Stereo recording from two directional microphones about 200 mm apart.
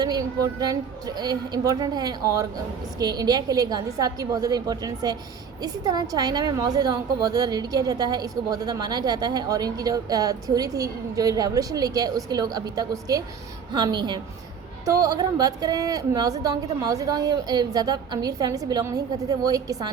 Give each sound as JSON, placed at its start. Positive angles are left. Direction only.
{"t": 0.0, "sound": "a woman's voice", "side_deg": -20}